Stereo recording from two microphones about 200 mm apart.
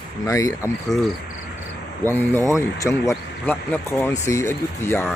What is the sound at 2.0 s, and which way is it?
Speech, 10° left (ahead or behind).